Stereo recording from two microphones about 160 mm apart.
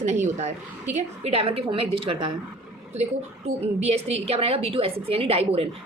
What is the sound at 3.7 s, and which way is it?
A woman's voice, 40° right (ahead or behind).